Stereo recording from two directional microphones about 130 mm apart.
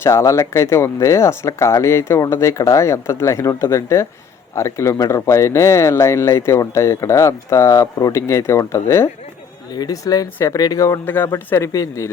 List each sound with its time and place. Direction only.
0.0 s speech: 20° left (ahead or behind)